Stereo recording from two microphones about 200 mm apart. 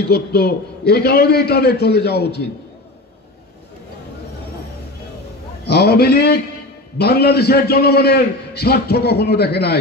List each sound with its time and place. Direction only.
0.0 s a man's voice: 55° left (ahead or behind)
5.7 s a man's voice: 55° left (ahead or behind)